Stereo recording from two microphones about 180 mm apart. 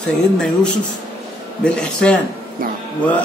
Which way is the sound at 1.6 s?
5° left (ahead or behind).